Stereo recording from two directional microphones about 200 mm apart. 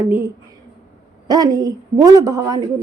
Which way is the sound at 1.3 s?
20° right (ahead or behind).